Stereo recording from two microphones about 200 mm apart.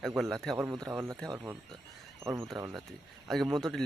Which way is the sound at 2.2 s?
10° right (ahead or behind).